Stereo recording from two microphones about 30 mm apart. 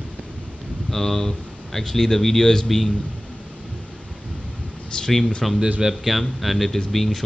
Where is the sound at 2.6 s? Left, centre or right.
Centre.